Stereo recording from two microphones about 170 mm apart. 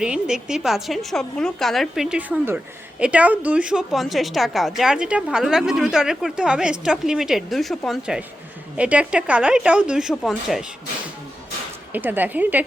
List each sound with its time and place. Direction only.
0.0 s a woman's voice: 5° right (ahead or behind)
11.9 s a woman's voice: 10° right (ahead or behind)